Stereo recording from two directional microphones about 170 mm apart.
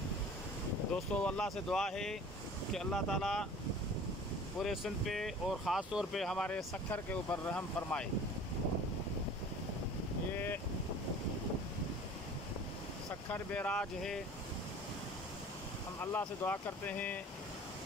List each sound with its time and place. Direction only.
0.9 s speech: 5° left (ahead or behind)
4.6 s speech: centre (ahead or behind)
10.3 s boat: 10° left (ahead or behind)
13.3 s speech: 10° left (ahead or behind)
16.0 s speech: 10° left (ahead or behind)